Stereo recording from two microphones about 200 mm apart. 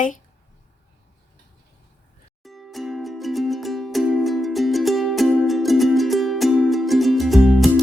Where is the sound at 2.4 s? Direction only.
Centre (ahead or behind).